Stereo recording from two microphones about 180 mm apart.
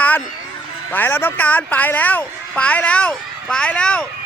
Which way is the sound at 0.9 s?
10° left (ahead or behind).